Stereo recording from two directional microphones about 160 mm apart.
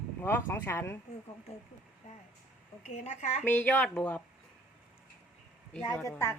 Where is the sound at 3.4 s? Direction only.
10° left (ahead or behind).